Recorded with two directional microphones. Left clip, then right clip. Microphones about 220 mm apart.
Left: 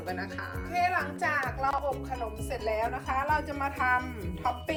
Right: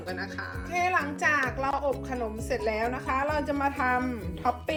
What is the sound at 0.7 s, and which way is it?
Speech, 30° right (ahead or behind).